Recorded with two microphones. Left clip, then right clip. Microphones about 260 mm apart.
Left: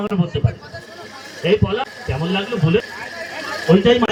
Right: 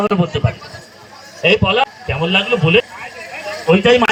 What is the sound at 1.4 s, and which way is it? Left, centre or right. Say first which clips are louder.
A man's voice: right 5 dB; centre.